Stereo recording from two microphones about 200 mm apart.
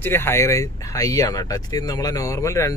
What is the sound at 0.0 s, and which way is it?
Speech, 10° left (ahead or behind).